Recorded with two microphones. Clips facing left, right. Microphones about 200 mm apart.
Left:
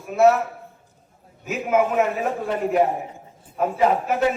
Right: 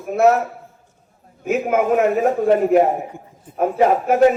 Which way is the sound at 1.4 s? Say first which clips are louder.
Right 4 dB; 50° right (ahead or behind).